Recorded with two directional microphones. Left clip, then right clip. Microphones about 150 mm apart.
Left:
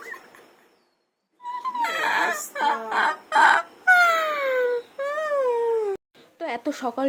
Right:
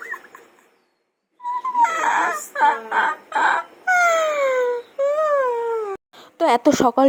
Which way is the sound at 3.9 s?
15° left (ahead or behind).